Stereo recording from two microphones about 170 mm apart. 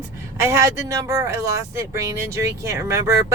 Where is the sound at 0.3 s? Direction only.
15° right (ahead or behind).